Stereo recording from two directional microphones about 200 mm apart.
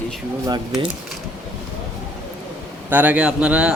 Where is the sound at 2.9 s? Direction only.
10° right (ahead or behind).